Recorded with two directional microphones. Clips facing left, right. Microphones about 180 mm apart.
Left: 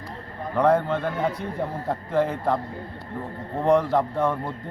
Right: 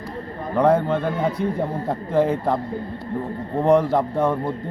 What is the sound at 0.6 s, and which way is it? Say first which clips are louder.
A man's voice: right 2 dB; 15° right (ahead or behind).